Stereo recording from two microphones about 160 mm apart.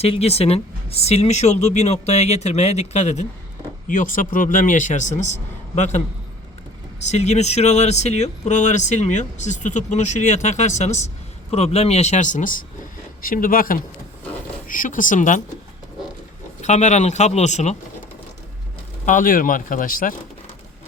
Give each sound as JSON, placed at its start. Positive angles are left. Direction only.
{"t": 0.0, "sound": "speech", "side_deg": 40}
{"t": 3.8, "sound": "speech", "side_deg": 55}
{"t": 7.1, "sound": "speech", "side_deg": 45}
{"t": 16.6, "sound": "speech", "side_deg": 45}
{"t": 19.0, "sound": "speech", "side_deg": 55}